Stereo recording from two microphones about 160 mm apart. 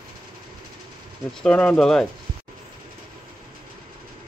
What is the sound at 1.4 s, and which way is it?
Speech, 5° left (ahead or behind).